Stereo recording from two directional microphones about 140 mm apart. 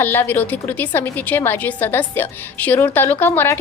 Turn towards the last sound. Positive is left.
turn(degrees=15)  # may be behind; listen again after turning